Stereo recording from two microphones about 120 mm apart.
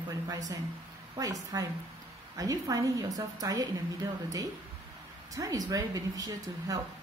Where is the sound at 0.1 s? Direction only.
30° right (ahead or behind).